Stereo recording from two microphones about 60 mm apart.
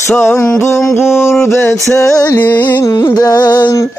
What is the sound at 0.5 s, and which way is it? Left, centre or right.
Mantra, left.